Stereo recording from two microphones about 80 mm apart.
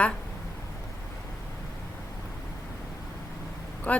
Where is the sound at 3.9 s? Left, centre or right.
Centre.